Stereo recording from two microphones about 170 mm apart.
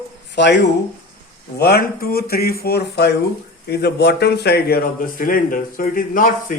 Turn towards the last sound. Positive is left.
turn(degrees=55)  # may be behind; listen again after turning